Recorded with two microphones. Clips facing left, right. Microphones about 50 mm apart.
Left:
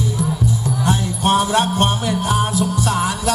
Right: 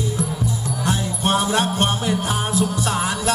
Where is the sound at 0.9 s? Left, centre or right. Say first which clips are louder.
Left 3 dB; left.